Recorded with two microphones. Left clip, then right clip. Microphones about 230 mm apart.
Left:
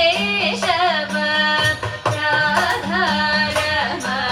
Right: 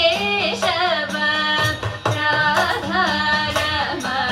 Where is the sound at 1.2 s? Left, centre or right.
Right.